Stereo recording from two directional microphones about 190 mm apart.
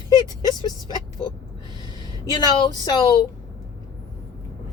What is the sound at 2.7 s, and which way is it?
Speech, 20° left (ahead or behind).